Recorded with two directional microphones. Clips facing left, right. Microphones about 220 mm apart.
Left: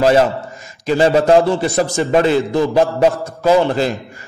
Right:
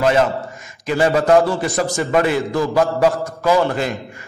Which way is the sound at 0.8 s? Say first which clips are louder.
Left 3 dB; 25° left (ahead or behind).